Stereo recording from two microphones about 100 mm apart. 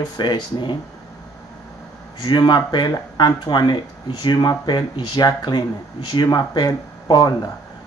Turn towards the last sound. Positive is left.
turn(degrees=40)  # may be behind; listen again after turning